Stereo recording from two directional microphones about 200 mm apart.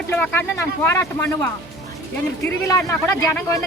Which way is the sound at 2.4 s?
15° left (ahead or behind).